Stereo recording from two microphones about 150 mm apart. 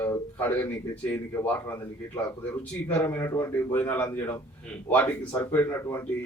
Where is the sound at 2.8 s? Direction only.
15° left (ahead or behind).